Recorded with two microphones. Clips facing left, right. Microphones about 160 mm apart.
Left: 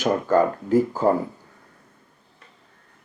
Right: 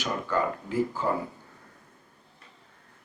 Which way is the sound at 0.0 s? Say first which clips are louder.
Left 9 dB; 45° left (ahead or behind).